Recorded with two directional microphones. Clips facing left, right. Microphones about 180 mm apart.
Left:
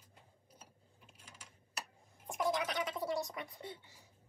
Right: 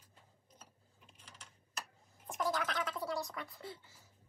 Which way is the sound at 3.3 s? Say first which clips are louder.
Left 1 dB; 20° left (ahead or behind).